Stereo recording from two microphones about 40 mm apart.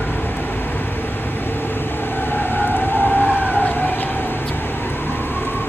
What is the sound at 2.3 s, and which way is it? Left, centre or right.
Siren, left.